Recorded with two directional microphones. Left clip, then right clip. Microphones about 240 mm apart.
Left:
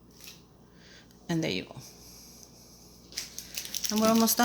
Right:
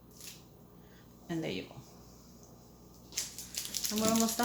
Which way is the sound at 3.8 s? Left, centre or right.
Left.